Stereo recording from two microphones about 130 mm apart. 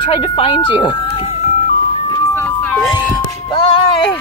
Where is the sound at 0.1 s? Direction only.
40° left (ahead or behind).